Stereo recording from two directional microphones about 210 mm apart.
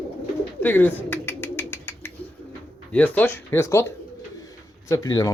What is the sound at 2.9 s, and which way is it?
Speech, 5° left (ahead or behind).